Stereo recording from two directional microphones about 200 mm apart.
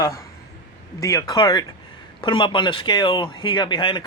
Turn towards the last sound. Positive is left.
turn(degrees=25)  # may be behind; listen again after turning